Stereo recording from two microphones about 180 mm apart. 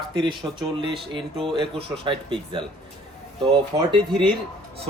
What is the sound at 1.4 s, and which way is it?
A man's voice, 30° right (ahead or behind).